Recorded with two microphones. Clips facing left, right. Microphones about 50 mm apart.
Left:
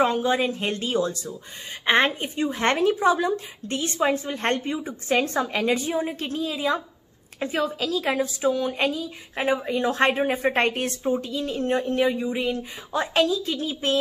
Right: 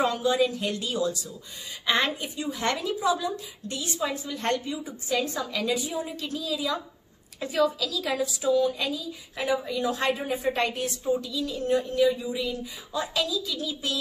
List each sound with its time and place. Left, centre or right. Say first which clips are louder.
0.0 s a woman's voice: left 2 dB; left